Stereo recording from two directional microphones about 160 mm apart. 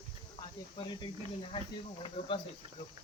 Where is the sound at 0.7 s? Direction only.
30° left (ahead or behind).